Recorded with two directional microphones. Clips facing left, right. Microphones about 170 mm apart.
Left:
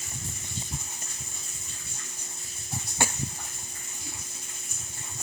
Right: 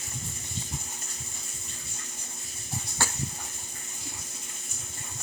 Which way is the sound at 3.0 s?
20° left (ahead or behind).